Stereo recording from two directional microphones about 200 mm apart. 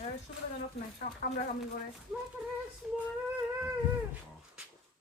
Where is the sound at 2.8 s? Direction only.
Centre (ahead or behind).